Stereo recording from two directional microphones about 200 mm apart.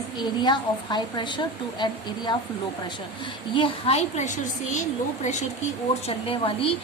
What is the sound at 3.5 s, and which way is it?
A woman's voice, 30° left (ahead or behind).